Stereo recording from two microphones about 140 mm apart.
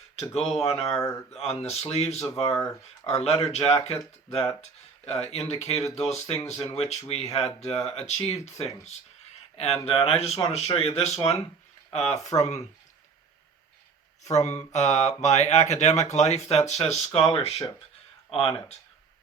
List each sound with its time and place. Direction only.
0.5 s speech: 45° left (ahead or behind)
0.9 s speech: 25° left (ahead or behind)
1.4 s speech: 50° left (ahead or behind)
14.3 s speech: 55° left (ahead or behind)